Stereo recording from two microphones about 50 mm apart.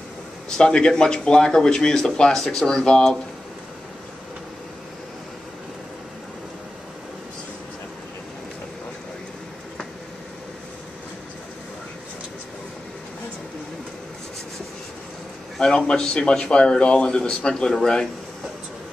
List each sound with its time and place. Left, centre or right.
0.5 s speech: centre
15.6 s speech: centre